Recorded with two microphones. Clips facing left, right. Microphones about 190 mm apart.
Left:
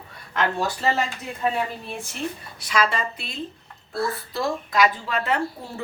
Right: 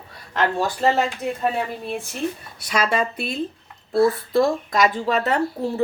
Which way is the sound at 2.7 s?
50° right (ahead or behind).